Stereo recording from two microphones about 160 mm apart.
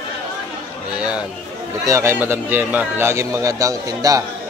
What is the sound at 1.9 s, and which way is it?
A man's voice, 15° right (ahead or behind).